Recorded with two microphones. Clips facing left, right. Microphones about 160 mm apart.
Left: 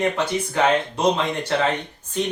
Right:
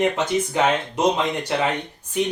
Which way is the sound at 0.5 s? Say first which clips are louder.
Left 1 dB; 15° right (ahead or behind).